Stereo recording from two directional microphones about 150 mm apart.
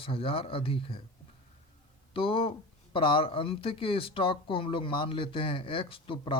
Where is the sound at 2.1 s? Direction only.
35° left (ahead or behind).